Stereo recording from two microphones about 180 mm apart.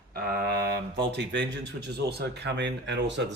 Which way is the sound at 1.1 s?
75° right (ahead or behind).